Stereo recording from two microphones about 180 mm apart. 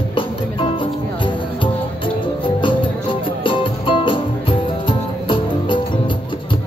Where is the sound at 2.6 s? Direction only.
30° left (ahead or behind).